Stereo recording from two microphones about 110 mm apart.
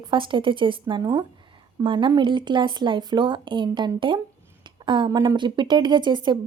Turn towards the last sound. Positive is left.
turn(degrees=-45)  # may be behind; listen again after turning